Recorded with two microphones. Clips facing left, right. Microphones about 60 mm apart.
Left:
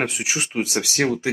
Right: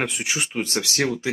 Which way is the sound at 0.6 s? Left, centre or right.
Centre.